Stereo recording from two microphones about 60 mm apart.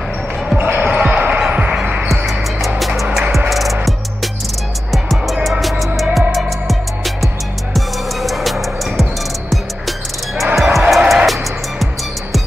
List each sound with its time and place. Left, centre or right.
0.6 s basketball bounce: right
3.2 s music: centre
4.9 s music: centre